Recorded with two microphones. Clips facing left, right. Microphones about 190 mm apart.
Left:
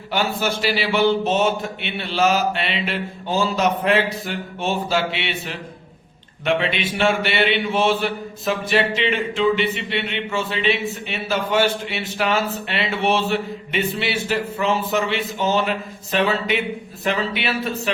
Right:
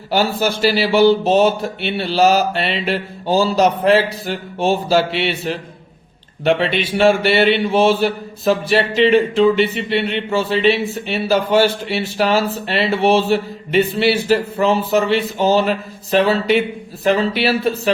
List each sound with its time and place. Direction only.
0.1 s speech: 35° right (ahead or behind)